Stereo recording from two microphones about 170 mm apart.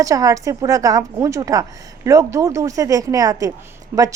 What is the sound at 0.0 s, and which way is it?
A woman's voice, 20° right (ahead or behind).